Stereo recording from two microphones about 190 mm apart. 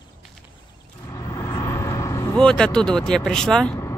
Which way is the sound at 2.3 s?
5° left (ahead or behind).